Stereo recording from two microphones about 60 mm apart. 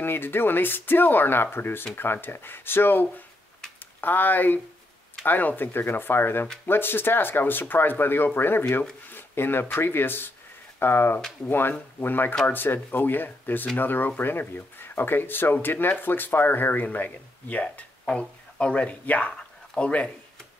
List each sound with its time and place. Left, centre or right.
0.0 s speech: left; by 20.1 s centre